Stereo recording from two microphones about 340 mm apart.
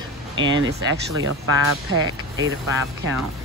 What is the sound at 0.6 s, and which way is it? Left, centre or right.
Speech, right.